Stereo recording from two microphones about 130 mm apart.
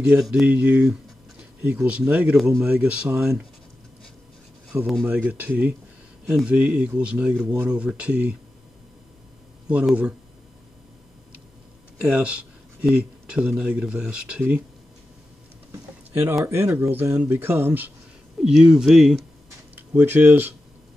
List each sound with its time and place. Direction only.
0.3 s speech: 10° right (ahead or behind)
5.0 s speech: 15° right (ahead or behind)
9.7 s speech: 10° right (ahead or behind)
12.1 s speech: 10° right (ahead or behind)
16.1 s speech: 15° right (ahead or behind)
18.4 s speech: 5° right (ahead or behind)
19.7 s speech: 15° right (ahead or behind)